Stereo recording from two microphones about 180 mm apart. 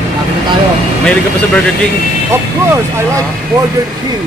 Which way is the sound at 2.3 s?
15° right (ahead or behind).